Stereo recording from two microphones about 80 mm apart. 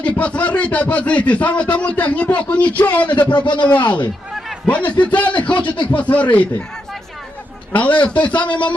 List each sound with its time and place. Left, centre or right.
0.0 s speech: centre
3.3 s speech: left
4.6 s speech: centre
7.7 s speech: centre
8.2 s speech: left
8.4 s speech: centre